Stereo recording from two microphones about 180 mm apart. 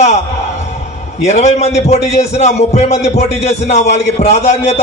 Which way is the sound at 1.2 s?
40° left (ahead or behind).